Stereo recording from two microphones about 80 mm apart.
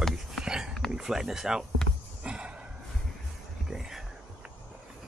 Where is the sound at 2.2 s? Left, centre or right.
Centre.